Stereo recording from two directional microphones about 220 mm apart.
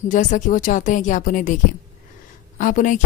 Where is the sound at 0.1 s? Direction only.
35° left (ahead or behind).